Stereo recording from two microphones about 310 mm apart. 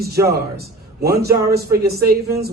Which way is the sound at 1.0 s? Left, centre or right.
Right.